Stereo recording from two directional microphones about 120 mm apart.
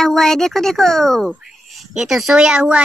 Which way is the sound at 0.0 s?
5° left (ahead or behind).